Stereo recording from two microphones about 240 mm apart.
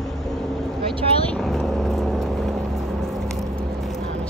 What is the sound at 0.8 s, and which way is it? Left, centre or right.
Vehicle, right.